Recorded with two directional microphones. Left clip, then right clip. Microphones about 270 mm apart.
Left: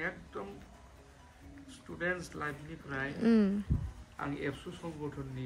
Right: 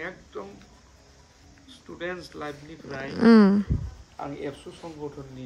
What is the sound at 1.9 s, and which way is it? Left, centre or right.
Speech, centre.